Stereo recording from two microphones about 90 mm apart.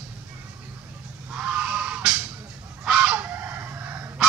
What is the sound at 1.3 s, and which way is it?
Goat, 10° right (ahead or behind).